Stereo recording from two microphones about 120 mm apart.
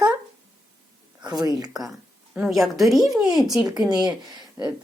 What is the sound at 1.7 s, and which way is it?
A woman's voice, centre (ahead or behind).